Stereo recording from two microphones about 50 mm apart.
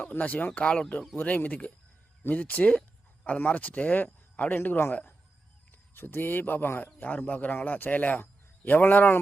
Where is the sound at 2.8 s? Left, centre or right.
Left.